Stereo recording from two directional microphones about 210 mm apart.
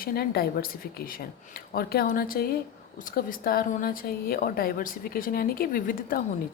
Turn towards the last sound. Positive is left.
turn(degrees=45)  # may be behind; listen again after turning